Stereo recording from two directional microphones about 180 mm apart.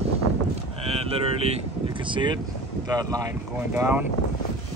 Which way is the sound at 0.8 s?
35° right (ahead or behind).